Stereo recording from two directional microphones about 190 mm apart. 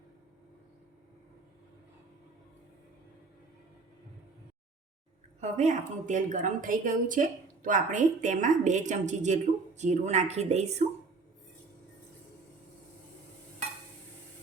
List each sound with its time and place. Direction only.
5.4 s a woman's voice: 35° right (ahead or behind)